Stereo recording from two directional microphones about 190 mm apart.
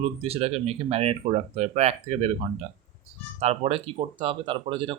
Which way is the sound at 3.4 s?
30° right (ahead or behind).